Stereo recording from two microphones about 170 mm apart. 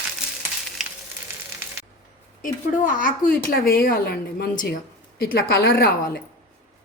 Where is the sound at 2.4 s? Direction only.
50° left (ahead or behind).